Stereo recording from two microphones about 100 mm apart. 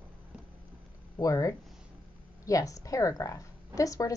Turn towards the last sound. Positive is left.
turn(degrees=35)  # may be behind; listen again after turning